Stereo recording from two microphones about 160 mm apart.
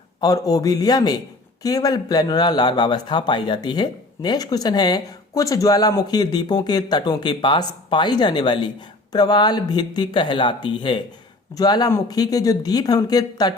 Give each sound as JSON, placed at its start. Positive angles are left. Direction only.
{"t": 0.2, "sound": "a man's voice", "side_deg": 25}